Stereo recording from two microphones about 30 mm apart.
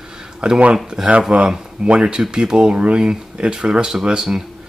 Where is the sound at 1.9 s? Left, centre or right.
Right.